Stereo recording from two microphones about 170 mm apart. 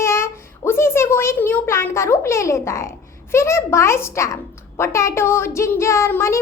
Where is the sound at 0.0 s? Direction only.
15° left (ahead or behind).